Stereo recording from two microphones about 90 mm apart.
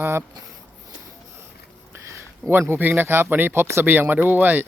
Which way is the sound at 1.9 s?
30° right (ahead or behind).